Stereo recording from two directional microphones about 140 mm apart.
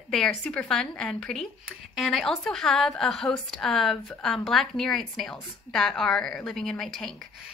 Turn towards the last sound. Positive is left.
turn(degrees=5)  # may be behind; listen again after turning